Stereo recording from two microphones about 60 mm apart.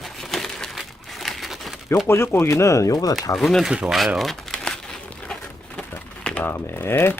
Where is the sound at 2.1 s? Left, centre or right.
Left.